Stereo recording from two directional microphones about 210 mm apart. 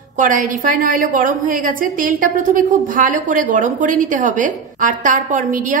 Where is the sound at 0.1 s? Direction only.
40° right (ahead or behind).